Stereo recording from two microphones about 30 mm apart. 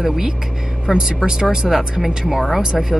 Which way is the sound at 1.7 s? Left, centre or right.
Centre.